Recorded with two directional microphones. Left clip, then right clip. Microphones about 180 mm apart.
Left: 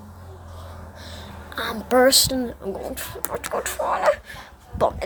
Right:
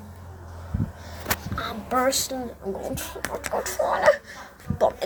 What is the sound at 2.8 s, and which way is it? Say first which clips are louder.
Speech: even; 15° left (ahead or behind).